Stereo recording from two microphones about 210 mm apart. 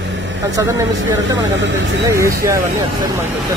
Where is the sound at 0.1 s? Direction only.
60° right (ahead or behind).